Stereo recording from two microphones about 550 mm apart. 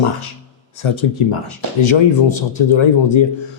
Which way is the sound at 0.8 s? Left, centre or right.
Left.